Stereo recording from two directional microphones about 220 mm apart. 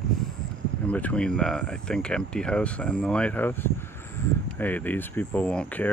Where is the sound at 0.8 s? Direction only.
5° left (ahead or behind).